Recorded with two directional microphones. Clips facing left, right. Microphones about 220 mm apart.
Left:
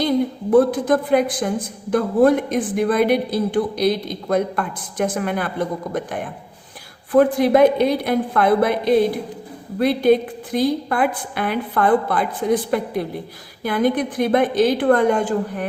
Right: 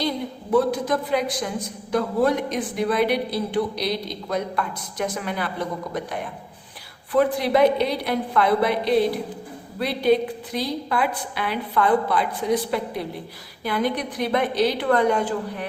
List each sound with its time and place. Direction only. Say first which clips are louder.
0.5 s a woman's voice: left 5 dB; 50° left (ahead or behind)